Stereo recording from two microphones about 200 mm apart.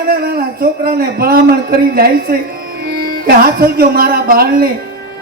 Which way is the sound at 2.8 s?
50° right (ahead or behind).